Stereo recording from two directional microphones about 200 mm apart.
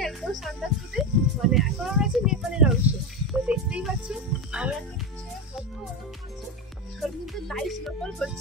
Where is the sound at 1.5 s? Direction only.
Centre (ahead or behind).